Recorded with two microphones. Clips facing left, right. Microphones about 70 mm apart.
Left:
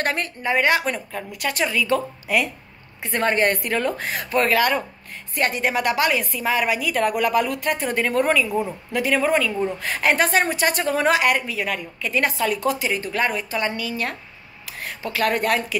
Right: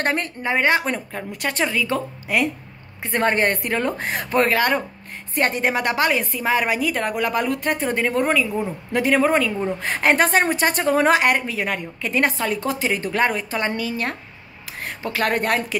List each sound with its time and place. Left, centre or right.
0.0 s a woman's voice: right
4.0 s speech: right
4.4 s a woman's voice: right
7.0 s a woman's voice: right
8.0 s a woman's voice: centre
8.9 s a woman's voice: right
12.8 s a woman's voice: right